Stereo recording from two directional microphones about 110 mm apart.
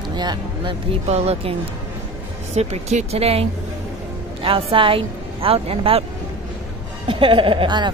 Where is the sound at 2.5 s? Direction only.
75° right (ahead or behind).